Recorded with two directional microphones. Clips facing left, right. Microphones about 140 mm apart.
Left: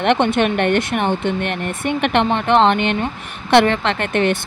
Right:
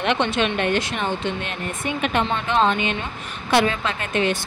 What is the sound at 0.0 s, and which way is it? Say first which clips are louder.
Speech: left 5 dB; 55° left (ahead or behind).